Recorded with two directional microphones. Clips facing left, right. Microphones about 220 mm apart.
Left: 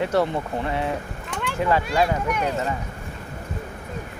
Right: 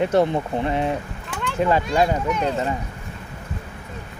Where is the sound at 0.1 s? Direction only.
20° right (ahead or behind).